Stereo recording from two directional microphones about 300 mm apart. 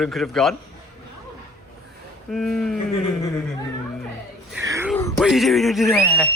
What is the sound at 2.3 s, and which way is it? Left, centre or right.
Speech, centre.